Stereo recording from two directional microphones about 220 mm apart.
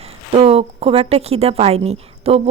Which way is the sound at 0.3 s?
25° right (ahead or behind).